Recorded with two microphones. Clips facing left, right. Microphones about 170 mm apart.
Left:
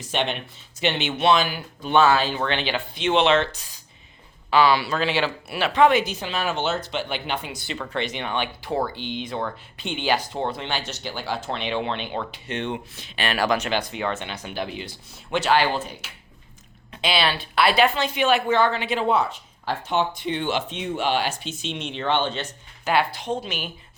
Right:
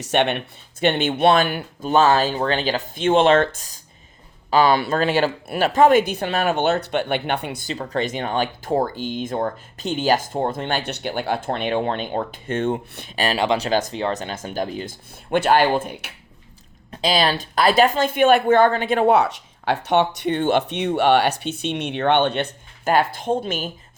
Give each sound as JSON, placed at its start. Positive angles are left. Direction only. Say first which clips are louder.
{"t": 0.0, "sound": "speech", "louder": "right 6 dB", "side_deg": -65}
{"t": 1.9, "sound": "speech", "louder": "right 2 dB", "side_deg": -40}
{"t": 7.7, "sound": "speech", "louder": "right 4 dB", "side_deg": -40}
{"t": 12.9, "sound": "speech", "louder": "right 5 dB", "side_deg": -60}
{"t": 13.3, "sound": "speech", "louder": "right 1 dB", "side_deg": -25}
{"t": 13.7, "sound": "speech", "louder": "right 4 dB", "side_deg": -40}
{"t": 16.9, "sound": "speech", "louder": "right 4 dB", "side_deg": -40}
{"t": 20.3, "sound": "speech", "louder": "right 8 dB", "side_deg": -50}